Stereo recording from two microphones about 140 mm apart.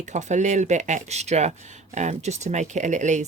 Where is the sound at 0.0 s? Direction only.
55° right (ahead or behind).